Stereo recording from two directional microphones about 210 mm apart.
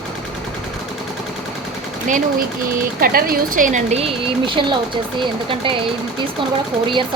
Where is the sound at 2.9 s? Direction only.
45° right (ahead or behind); by 5.0 s 25° right (ahead or behind).